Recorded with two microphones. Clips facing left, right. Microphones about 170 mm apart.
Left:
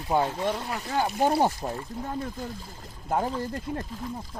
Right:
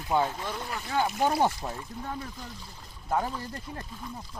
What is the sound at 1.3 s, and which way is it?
Speech, 10° left (ahead or behind).